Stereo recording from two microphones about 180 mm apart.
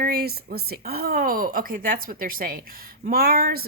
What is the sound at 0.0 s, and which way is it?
Speech, 60° right (ahead or behind).